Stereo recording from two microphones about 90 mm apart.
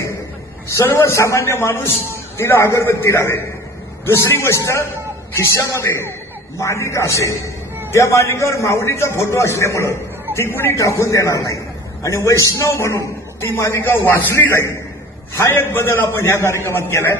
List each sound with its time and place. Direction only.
0.7 s a man's voice: 35° left (ahead or behind)